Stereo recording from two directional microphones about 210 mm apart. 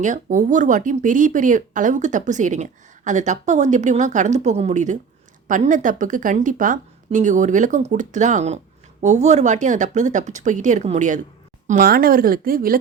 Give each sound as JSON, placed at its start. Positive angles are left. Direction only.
{"t": 0.0, "sound": "speech", "side_deg": -35}